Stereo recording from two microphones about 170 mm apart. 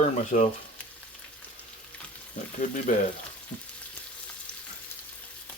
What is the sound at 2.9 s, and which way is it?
Speech, 50° left (ahead or behind).